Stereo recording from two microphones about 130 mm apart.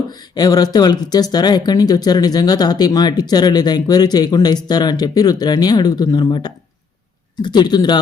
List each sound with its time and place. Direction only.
0.1 s speech: 30° left (ahead or behind)